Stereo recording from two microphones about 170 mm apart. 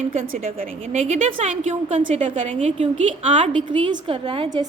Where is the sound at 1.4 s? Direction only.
40° right (ahead or behind).